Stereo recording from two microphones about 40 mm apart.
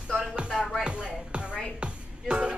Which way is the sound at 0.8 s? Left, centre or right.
Right.